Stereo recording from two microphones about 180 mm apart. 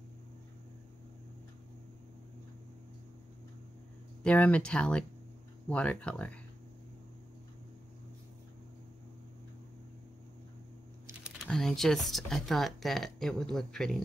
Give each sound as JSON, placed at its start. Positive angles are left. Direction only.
{"t": 4.2, "sound": "speech", "side_deg": 5}
{"t": 11.4, "sound": "speech", "side_deg": 5}